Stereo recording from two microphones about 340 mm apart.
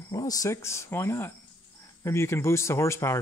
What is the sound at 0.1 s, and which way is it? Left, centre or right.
Speech, centre.